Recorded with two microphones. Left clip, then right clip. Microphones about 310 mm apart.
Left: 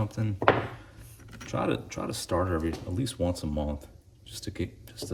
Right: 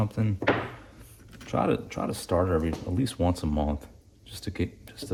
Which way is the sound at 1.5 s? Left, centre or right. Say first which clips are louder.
Right 3 dB; centre.